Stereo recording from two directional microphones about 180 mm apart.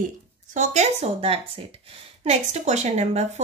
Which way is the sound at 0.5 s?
40° right (ahead or behind).